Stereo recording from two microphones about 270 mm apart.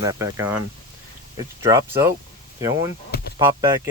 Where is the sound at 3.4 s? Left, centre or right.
Centre.